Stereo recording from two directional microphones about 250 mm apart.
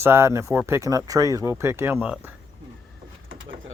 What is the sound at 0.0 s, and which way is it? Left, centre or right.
Speech, centre.